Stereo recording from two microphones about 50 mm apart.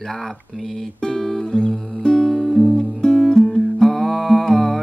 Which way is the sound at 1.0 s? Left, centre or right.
Centre.